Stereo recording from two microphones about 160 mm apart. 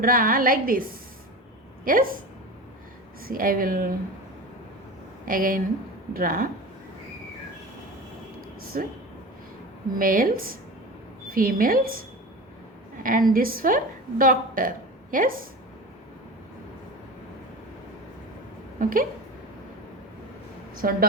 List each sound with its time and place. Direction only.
0.0 s a woman's voice: 60° right (ahead or behind)
3.2 s a woman's voice: 60° right (ahead or behind)
5.2 s a woman's voice: 60° right (ahead or behind)
8.6 s speech: 65° right (ahead or behind)
10.0 s a woman's voice: 60° right (ahead or behind)
13.0 s a woman's voice: 60° right (ahead or behind)
18.8 s speech: 60° right (ahead or behind)
20.8 s a woman's voice: 65° right (ahead or behind)